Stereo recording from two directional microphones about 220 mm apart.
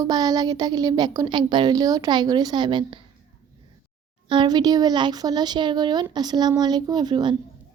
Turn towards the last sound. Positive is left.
turn(degrees=-20)  # may be behind; listen again after turning